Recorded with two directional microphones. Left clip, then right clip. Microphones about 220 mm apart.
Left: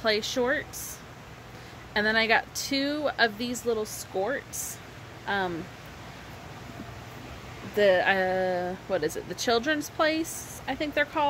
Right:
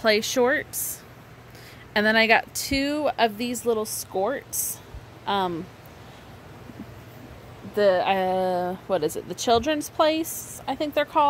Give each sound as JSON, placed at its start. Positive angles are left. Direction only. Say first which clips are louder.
{"t": 0.0, "sound": "a woman's voice", "louder": "right 5 dB", "side_deg": -40}
{"t": 2.0, "sound": "a woman's voice", "louder": "right 4 dB", "side_deg": -40}
{"t": 7.7, "sound": "speech", "louder": "right 2 dB", "side_deg": 5}
{"t": 8.0, "sound": "speech", "louder": "right 2 dB", "side_deg": -25}